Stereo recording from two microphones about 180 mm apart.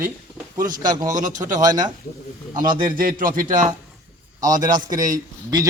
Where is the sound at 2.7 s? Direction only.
50° right (ahead or behind).